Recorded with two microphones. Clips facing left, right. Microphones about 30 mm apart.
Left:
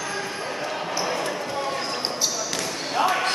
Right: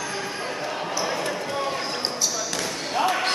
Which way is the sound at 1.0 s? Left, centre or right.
Centre.